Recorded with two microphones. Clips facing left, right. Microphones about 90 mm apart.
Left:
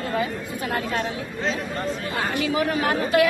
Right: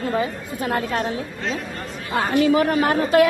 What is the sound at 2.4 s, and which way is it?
Speech, 45° right (ahead or behind).